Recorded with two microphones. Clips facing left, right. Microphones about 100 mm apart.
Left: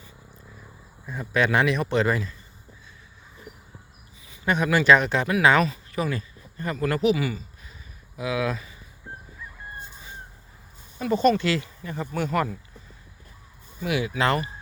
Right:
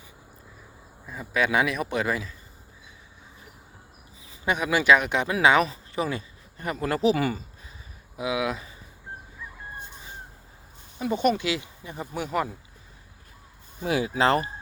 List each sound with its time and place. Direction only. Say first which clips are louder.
1.0 s speech: left 2 dB; 5° right (ahead or behind)
4.4 s speech: left 2 dB; 10° right (ahead or behind)
7.1 s speech: even; 45° right (ahead or behind)
8.1 s speech: left 1 dB; 15° right (ahead or behind)
10.9 s speech: left 3 dB; 15° right (ahead or behind)
13.8 s speech: right 1 dB; 35° right (ahead or behind)